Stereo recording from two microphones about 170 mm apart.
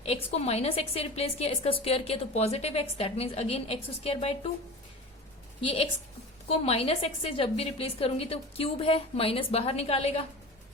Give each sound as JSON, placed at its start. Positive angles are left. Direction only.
{"t": 0.0, "sound": "a woman's voice", "side_deg": 35}
{"t": 5.5, "sound": "a woman's voice", "side_deg": 30}